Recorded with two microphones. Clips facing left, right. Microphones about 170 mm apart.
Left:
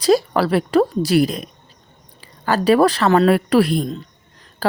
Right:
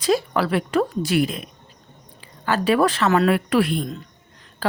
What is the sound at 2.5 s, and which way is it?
Speech, 35° left (ahead or behind).